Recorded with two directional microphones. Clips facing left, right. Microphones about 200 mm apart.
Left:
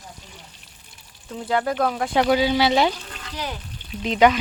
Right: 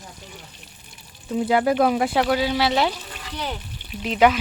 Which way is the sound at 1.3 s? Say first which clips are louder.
Right 4 dB; 10° right (ahead or behind).